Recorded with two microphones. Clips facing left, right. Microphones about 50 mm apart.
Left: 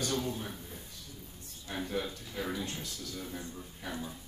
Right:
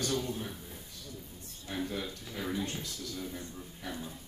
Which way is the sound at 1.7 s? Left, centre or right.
Centre.